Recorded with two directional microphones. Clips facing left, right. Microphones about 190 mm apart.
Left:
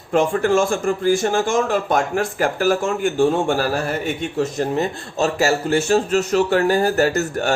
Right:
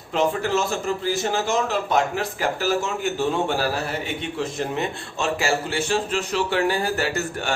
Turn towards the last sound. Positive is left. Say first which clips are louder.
# left 6 dB
turn(degrees=45)  # may be behind; listen again after turning